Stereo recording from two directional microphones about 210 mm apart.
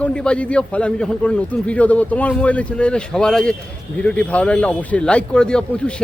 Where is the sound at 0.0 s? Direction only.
5° left (ahead or behind).